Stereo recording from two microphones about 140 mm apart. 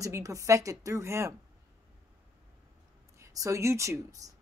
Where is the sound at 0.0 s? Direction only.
25° right (ahead or behind).